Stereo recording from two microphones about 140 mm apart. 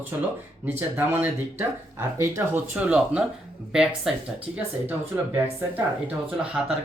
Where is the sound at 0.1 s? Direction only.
20° right (ahead or behind).